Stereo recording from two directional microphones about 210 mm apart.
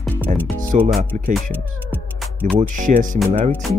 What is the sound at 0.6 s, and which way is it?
Speech, 40° right (ahead or behind).